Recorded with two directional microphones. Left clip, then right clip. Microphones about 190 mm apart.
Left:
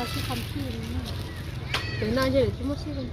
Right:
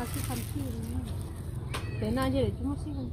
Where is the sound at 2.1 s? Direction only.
35° right (ahead or behind).